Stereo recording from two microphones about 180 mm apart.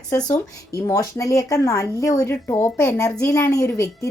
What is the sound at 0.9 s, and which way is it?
Speech, 15° left (ahead or behind).